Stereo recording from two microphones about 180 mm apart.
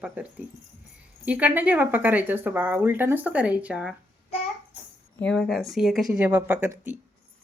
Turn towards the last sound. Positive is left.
turn(degrees=-10)  # may be behind; listen again after turning